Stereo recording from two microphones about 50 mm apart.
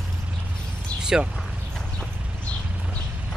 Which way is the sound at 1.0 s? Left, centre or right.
Centre.